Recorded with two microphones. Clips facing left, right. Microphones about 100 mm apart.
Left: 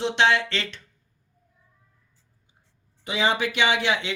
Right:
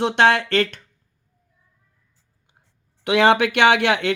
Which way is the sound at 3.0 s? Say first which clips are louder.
Right 8 dB; 65° right (ahead or behind).